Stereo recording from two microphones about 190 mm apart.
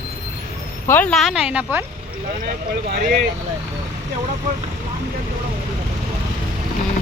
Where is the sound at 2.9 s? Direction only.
45° right (ahead or behind).